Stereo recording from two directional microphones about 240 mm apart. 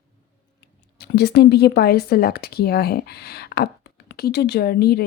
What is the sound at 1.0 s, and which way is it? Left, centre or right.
A woman's voice, left.